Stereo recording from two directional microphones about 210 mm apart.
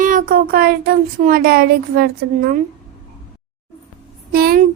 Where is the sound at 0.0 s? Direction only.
40° right (ahead or behind).